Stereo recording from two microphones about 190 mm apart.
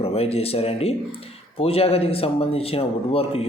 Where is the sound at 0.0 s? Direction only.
30° left (ahead or behind).